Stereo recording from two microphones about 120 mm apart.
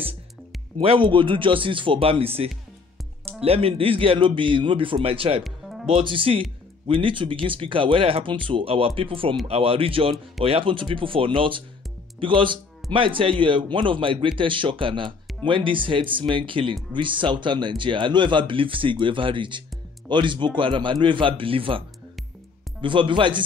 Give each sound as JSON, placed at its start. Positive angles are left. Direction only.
{"t": 0.7, "sound": "speech", "side_deg": -45}
{"t": 5.4, "sound": "music", "side_deg": 0}
{"t": 5.9, "sound": "speech", "side_deg": -50}